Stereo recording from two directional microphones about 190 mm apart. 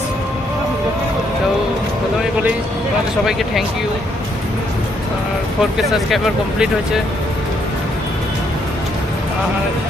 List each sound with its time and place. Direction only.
3.2 s speech: centre (ahead or behind)
5.7 s speech: centre (ahead or behind)